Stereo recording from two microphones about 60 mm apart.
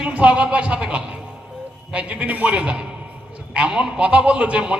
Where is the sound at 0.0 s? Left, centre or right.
Centre.